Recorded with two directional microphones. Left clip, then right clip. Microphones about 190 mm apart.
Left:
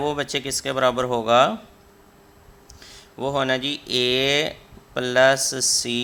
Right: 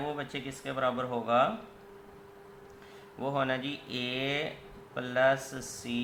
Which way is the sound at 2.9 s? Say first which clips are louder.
Left 9 dB; 50° left (ahead or behind).